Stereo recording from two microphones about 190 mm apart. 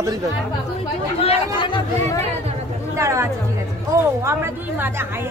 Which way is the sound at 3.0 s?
15° right (ahead or behind).